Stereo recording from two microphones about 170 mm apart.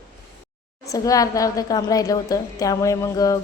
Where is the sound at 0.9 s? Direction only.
20° left (ahead or behind).